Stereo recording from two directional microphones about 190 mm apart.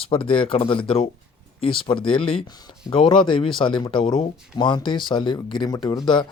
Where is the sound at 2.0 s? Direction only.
25° left (ahead or behind).